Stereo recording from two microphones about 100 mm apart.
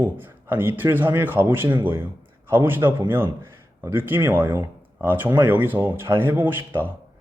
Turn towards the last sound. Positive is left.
turn(degrees=-20)  # may be behind; listen again after turning